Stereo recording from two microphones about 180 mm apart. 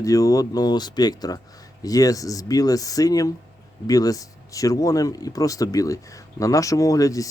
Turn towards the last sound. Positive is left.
turn(degrees=20)  # may be behind; listen again after turning